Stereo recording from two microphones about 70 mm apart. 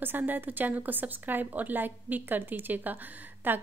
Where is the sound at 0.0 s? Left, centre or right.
Right.